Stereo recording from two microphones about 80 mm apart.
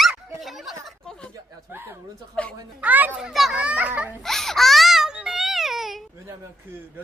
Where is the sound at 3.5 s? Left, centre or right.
Centre.